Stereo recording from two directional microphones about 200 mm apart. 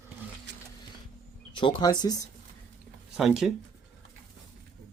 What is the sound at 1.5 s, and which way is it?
Speech, 25° left (ahead or behind).